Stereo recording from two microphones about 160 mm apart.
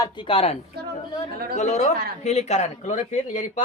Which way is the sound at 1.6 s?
45° left (ahead or behind).